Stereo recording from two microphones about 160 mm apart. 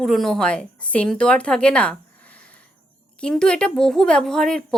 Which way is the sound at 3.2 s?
5° left (ahead or behind).